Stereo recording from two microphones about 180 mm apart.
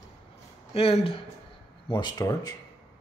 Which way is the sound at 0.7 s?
35° left (ahead or behind).